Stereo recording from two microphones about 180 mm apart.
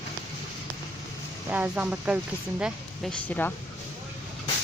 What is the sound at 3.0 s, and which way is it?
Speech, 10° left (ahead or behind).